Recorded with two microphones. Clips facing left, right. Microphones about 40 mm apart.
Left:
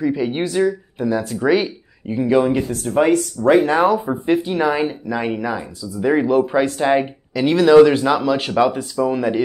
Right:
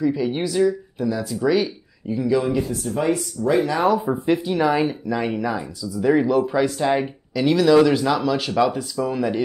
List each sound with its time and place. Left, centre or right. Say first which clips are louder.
0.0 s speech: left 2 dB; left
4.3 s speech: left 3 dB; centre
4.6 s speech: left 1 dB; centre; by 9.0 s left
9.0 s speech: left 4 dB; centre